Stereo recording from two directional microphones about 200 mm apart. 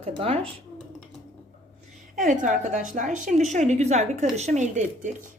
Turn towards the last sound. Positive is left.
turn(degrees=-40)  # may be behind; listen again after turning